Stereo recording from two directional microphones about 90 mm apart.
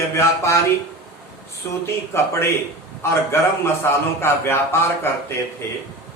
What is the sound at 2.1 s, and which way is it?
Speech, 30° left (ahead or behind).